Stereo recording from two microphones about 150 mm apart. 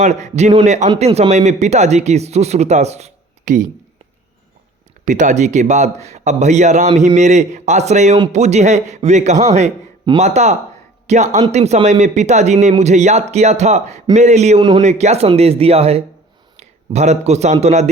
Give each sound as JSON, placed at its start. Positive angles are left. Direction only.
{"t": 0.0, "sound": "speech", "side_deg": -50}
{"t": 5.0, "sound": "a man's voice", "side_deg": -55}